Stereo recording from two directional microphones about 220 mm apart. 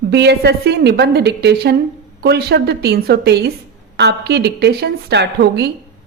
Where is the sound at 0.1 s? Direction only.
50° right (ahead or behind).